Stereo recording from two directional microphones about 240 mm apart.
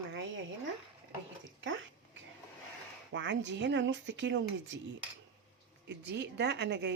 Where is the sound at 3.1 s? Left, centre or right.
Right.